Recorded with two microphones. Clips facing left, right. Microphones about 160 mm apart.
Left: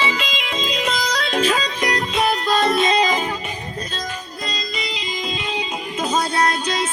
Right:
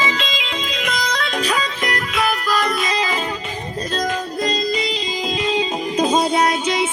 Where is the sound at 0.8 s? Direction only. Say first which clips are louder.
Right 1 dB; 35° left (ahead or behind).